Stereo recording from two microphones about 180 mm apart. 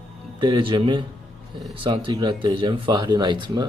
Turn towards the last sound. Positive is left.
turn(degrees=-25)  # may be behind; listen again after turning